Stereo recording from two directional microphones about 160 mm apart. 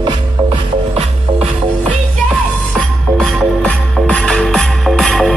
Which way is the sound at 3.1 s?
5° left (ahead or behind).